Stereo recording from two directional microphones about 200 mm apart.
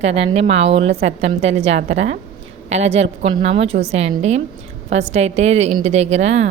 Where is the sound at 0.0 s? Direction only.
30° right (ahead or behind).